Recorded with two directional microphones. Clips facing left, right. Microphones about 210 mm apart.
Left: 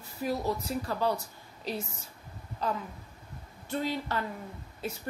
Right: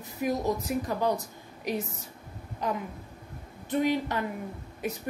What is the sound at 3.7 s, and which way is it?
A woman's voice, 15° right (ahead or behind).